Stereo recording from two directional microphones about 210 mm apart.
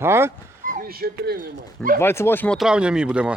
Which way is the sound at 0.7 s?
45° right (ahead or behind).